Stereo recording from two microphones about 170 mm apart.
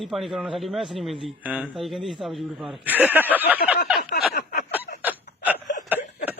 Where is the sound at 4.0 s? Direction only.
65° left (ahead or behind).